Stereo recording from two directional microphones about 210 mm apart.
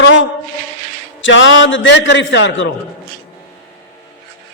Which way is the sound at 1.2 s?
65° left (ahead or behind).